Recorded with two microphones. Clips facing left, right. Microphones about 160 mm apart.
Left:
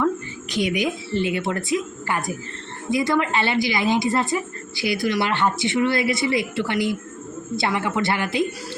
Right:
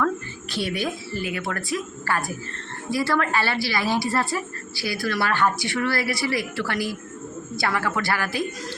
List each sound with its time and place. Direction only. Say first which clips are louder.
0.5 s a woman's voice: left 4 dB; 15° left (ahead or behind)